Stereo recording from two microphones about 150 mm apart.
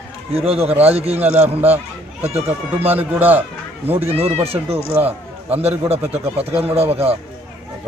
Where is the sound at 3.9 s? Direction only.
40° right (ahead or behind).